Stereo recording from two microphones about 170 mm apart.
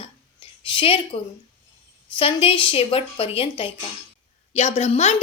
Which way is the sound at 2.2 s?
30° left (ahead or behind).